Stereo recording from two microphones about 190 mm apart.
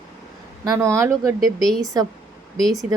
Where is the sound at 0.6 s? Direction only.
15° right (ahead or behind).